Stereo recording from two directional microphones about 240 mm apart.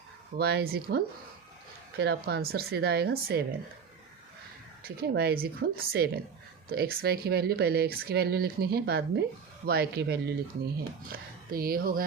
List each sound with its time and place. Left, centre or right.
0.3 s speech: right
4.8 s speech: right